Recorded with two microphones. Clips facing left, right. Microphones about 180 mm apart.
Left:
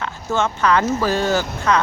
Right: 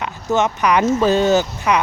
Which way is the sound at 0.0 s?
20° right (ahead or behind).